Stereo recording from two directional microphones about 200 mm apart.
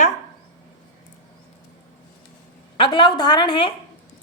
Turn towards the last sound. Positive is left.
turn(degrees=25)  # may be behind; listen again after turning